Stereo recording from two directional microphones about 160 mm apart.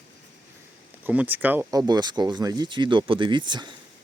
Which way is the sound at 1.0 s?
10° right (ahead or behind).